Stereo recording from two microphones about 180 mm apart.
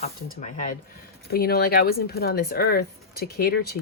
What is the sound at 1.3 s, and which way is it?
Speech, 60° left (ahead or behind).